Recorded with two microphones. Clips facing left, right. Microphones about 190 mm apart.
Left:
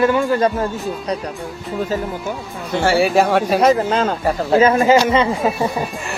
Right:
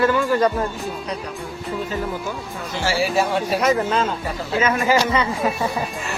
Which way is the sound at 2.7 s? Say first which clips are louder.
Left 6 dB; 55° left (ahead or behind).